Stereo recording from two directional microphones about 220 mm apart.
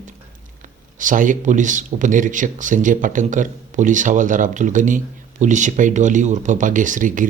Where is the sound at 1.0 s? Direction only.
35° right (ahead or behind).